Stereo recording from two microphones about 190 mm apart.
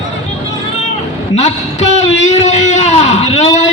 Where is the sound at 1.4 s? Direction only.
35° left (ahead or behind).